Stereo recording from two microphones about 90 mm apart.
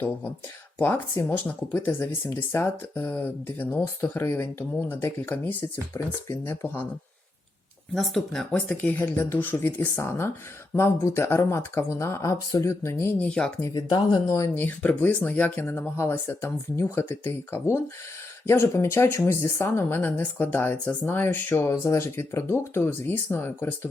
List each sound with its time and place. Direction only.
0.8 s speech: 20° left (ahead or behind)
7.9 s speech: centre (ahead or behind)
8.8 s speech: 20° left (ahead or behind)
13.1 s speech: 10° left (ahead or behind)
13.6 s speech: 35° left (ahead or behind)
14.5 s speech: 20° left (ahead or behind)